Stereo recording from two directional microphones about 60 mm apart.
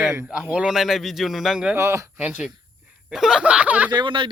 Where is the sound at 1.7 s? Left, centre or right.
Right.